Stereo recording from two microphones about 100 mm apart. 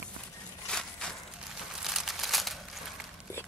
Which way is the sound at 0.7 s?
5° left (ahead or behind).